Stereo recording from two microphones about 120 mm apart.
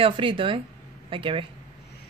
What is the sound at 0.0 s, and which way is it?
Speech, 45° right (ahead or behind).